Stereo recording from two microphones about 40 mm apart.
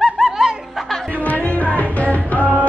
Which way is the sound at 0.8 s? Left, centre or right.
Centre.